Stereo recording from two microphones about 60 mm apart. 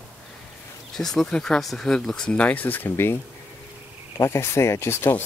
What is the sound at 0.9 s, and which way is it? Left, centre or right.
Speech, centre.